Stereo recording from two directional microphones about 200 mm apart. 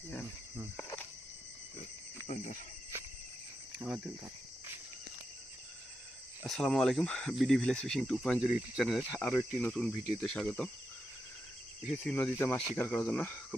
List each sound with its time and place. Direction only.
2.2 s speech: 40° left (ahead or behind)
3.8 s speech: 5° right (ahead or behind)
6.4 s speech: centre (ahead or behind)
11.9 s speech: 5° left (ahead or behind)